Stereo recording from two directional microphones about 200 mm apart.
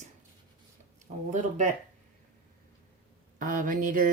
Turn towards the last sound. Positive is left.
turn(degrees=-40)  # may be behind; listen again after turning